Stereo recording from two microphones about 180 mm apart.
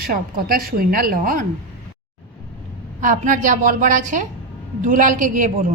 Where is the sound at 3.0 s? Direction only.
45° right (ahead or behind).